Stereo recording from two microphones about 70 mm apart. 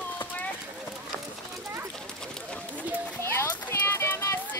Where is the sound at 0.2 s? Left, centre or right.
Left.